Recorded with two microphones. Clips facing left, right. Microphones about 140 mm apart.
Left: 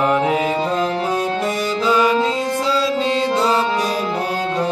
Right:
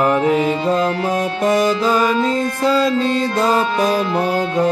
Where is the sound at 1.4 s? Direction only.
45° right (ahead or behind).